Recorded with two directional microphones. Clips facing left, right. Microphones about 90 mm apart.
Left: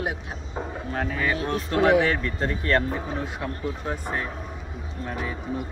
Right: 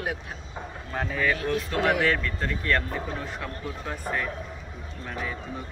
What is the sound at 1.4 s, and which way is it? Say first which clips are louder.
Speech: left 3 dB; 30° left (ahead or behind).